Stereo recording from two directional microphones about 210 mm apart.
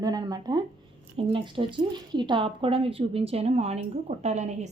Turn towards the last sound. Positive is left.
turn(degrees=-35)  # may be behind; listen again after turning